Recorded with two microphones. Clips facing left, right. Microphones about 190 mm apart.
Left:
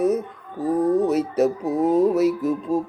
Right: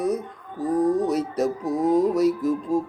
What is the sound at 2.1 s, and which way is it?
Speech, 5° left (ahead or behind).